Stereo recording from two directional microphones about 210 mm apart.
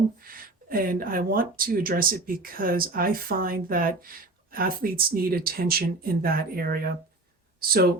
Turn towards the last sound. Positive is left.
turn(degrees=-45)  # may be behind; listen again after turning